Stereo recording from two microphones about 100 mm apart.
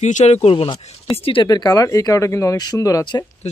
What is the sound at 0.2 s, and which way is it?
Speech, 90° left.